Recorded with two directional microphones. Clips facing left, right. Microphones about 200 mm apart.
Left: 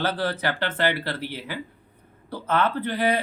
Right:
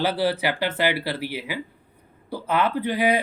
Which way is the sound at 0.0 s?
10° right (ahead or behind).